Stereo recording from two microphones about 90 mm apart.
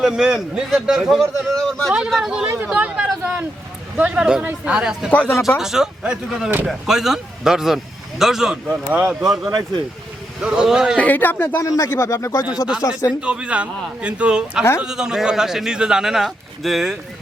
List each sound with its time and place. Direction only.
0.0 s a man's voice: 5° right (ahead or behind)
5.1 s speech: 20° left (ahead or behind)
5.5 s a man's voice: 5° right (ahead or behind)
8.9 s a man's voice: 15° right (ahead or behind)
9.2 s a man's voice: 5° right (ahead or behind)
9.5 s speech: 50° right (ahead or behind)
10.4 s a man's voice: 10° right (ahead or behind)
10.9 s speech: 15° left (ahead or behind)
11.9 s speech: 30° left (ahead or behind)
13.2 s a man's voice: 10° right (ahead or behind)